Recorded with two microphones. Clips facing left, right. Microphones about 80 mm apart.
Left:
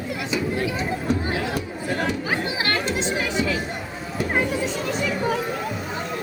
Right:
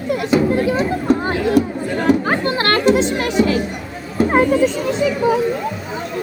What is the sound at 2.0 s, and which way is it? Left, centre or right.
Speech, right.